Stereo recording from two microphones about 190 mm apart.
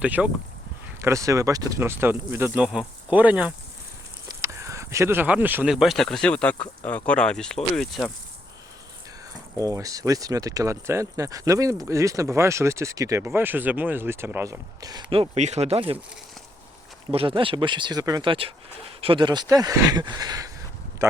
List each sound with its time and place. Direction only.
0.0 s speech: 5° right (ahead or behind)
9.6 s speech: 15° right (ahead or behind)
15.4 s speech: 35° right (ahead or behind)
17.1 s speech: 30° right (ahead or behind)
21.0 s a sound: 15° right (ahead or behind)